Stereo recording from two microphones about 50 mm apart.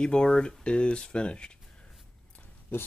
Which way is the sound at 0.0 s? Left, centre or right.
Centre.